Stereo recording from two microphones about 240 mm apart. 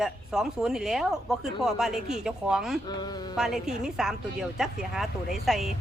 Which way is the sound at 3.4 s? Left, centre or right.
Centre.